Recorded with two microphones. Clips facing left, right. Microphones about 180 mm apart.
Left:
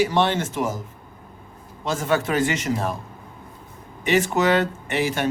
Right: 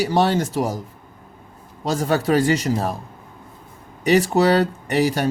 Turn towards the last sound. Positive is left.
turn(degrees=-40)  # may be behind; listen again after turning